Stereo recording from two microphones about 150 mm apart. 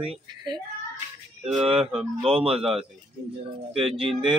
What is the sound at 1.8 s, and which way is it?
Speech, 5° right (ahead or behind).